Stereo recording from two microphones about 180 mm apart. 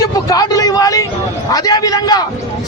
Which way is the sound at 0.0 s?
20° left (ahead or behind).